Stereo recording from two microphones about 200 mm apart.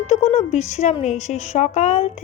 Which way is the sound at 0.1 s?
30° left (ahead or behind).